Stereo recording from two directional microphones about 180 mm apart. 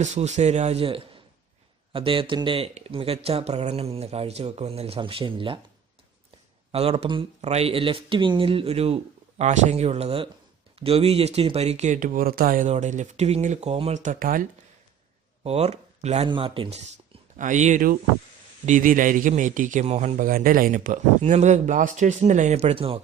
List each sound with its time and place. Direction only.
0.0 s speech: 40° right (ahead or behind)
6.7 s speech: 35° right (ahead or behind); by 14.4 s 50° right (ahead or behind)
15.4 s speech: 35° right (ahead or behind)
17.3 s a man's voice: 45° right (ahead or behind)